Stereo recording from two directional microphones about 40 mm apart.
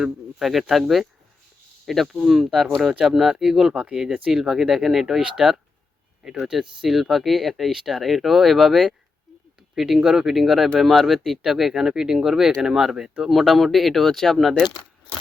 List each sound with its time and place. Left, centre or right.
0.4 s speech: centre
2.1 s speech: centre
5.2 s speech: centre